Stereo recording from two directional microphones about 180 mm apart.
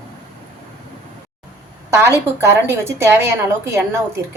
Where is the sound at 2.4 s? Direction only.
15° right (ahead or behind).